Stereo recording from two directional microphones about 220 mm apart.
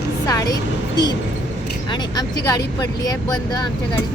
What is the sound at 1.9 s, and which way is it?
Speech, 20° left (ahead or behind).